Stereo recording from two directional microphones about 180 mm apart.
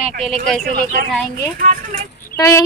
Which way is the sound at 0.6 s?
50° right (ahead or behind).